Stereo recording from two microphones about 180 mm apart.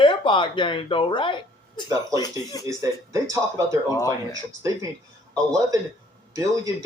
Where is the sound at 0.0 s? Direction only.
25° left (ahead or behind).